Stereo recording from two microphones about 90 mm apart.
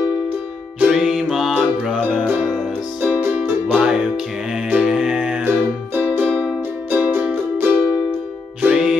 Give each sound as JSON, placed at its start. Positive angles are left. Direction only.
{"t": 0.7, "sound": "music", "side_deg": -10}
{"t": 5.4, "sound": "music", "side_deg": -20}